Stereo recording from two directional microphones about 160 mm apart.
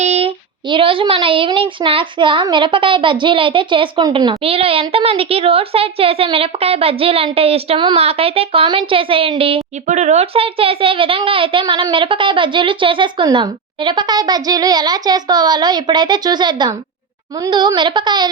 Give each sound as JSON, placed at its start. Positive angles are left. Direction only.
{"t": 0.0, "sound": "speech", "side_deg": -40}
{"t": 9.8, "sound": "a woman's voice", "side_deg": -45}